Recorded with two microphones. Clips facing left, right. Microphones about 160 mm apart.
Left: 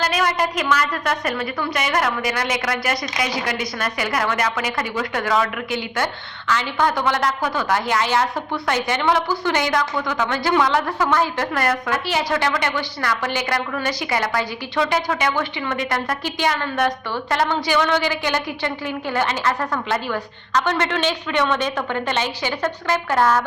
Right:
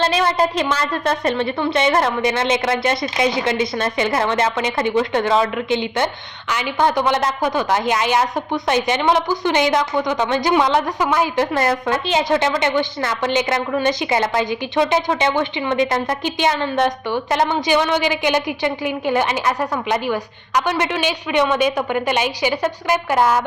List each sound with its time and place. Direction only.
0.0 s a woman's voice: 25° right (ahead or behind)